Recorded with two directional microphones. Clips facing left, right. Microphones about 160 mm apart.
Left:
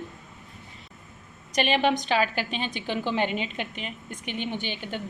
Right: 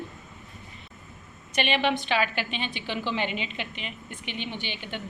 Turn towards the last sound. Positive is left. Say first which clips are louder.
# left 3 dB
turn(degrees=45)  # may be behind; listen again after turning